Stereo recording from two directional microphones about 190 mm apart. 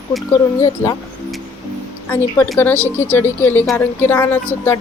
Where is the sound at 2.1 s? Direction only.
10° left (ahead or behind).